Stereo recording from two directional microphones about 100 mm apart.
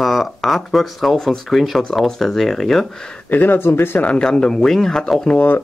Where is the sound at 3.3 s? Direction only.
20° left (ahead or behind).